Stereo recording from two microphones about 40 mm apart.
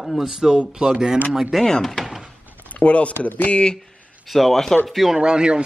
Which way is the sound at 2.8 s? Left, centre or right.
Left.